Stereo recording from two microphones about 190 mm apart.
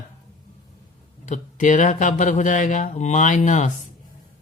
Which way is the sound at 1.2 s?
40° left (ahead or behind).